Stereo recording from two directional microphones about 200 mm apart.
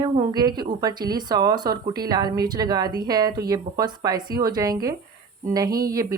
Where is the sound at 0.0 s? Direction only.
20° right (ahead or behind).